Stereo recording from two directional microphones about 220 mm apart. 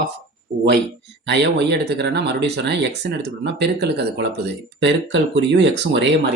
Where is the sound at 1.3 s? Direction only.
50° right (ahead or behind).